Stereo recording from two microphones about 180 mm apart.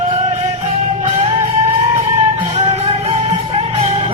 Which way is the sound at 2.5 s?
35° right (ahead or behind).